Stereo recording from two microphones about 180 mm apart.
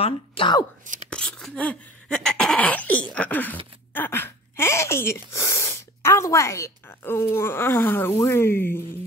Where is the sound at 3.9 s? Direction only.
10° left (ahead or behind).